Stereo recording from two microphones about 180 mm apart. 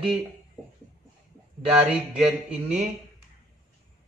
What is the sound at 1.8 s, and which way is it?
Speech, 5° right (ahead or behind).